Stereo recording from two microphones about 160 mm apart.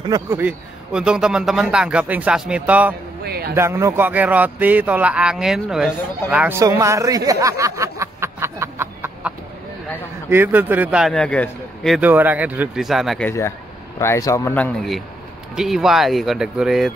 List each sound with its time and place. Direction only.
0.3 s a man's voice: 10° right (ahead or behind)
3.3 s speech: 75° right (ahead or behind)
3.5 s a man's voice: 15° right (ahead or behind)
6.6 s a sound: 20° right (ahead or behind)
10.3 s a man's voice: 10° right (ahead or behind)
11.1 s a man's voice: 10° left (ahead or behind)
12.0 s a man's voice: 10° right (ahead or behind)
13.9 s speech: 20° left (ahead or behind); by 16.9 s centre (ahead or behind)